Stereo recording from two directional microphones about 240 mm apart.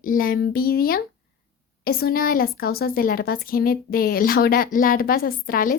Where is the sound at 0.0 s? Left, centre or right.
Left.